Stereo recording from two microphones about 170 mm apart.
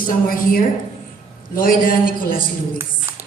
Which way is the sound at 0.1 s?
55° left (ahead or behind).